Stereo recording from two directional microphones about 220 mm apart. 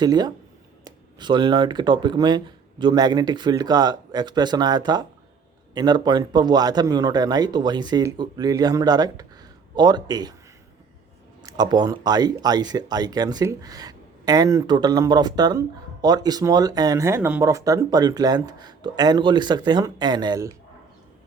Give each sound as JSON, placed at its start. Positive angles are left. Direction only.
{"t": 0.0, "sound": "a man's voice", "side_deg": -20}
{"t": 11.4, "sound": "speech", "side_deg": -20}